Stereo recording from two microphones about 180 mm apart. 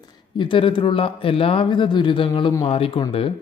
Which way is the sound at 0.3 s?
30° left (ahead or behind).